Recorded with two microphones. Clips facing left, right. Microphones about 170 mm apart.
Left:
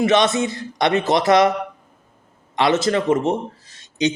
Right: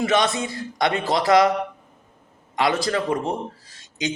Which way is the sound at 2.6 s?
25° left (ahead or behind).